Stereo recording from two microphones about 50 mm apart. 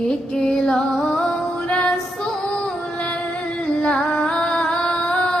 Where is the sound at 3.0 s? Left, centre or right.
Left.